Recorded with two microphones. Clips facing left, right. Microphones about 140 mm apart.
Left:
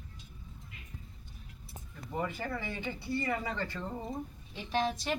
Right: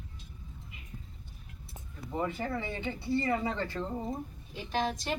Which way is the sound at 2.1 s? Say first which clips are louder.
Right 3 dB; 20° right (ahead or behind).